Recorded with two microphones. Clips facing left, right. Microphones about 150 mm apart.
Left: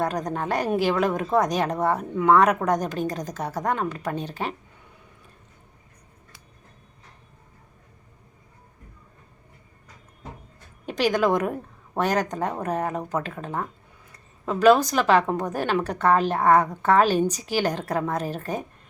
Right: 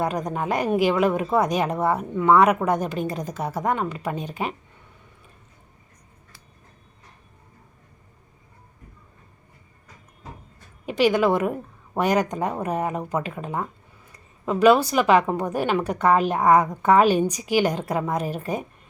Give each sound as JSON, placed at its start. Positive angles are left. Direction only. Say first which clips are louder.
{"t": 0.0, "sound": "a woman's voice", "louder": "right 1 dB", "side_deg": -10}
{"t": 10.8, "sound": "a woman's voice", "louder": "right 2 dB", "side_deg": -5}